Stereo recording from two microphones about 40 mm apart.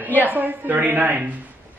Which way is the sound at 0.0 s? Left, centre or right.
Right.